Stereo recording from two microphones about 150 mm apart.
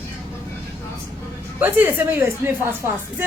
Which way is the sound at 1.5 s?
10° right (ahead or behind).